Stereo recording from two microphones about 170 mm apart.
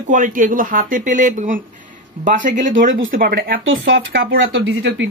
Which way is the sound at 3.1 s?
65° right (ahead or behind).